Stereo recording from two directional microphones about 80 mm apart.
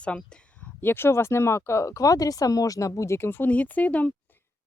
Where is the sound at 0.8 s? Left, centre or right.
Left.